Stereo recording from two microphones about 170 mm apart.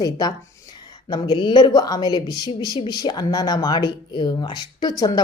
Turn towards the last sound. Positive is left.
turn(degrees=20)  # may be behind; listen again after turning